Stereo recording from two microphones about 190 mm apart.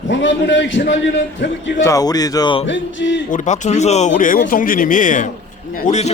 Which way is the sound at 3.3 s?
40° left (ahead or behind).